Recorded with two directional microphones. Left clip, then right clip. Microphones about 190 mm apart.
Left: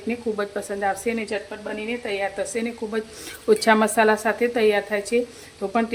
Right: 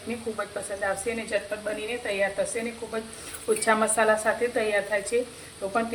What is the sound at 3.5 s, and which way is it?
Speech, 55° left (ahead or behind).